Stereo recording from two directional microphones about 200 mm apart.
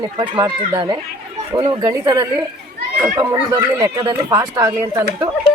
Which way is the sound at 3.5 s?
20° right (ahead or behind).